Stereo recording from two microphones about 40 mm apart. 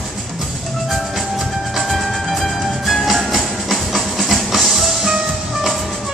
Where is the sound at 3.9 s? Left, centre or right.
Centre.